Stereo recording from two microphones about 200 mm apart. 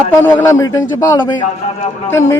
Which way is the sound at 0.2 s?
10° left (ahead or behind).